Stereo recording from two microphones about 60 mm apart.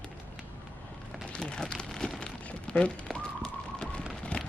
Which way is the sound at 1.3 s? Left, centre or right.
Centre.